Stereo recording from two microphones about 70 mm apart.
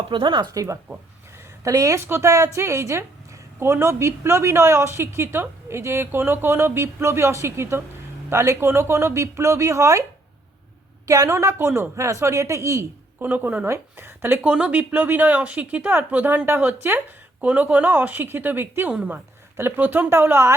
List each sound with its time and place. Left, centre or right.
0.6 s speech: right
2.0 s a woman's voice: right
11.0 s a woman's voice: right
11.3 s speech: right
13.1 s speech: right
14.4 s speech: centre
18.9 s speech: centre
19.5 s a woman's voice: right